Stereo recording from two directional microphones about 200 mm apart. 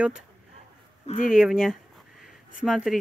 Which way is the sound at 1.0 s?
35° left (ahead or behind).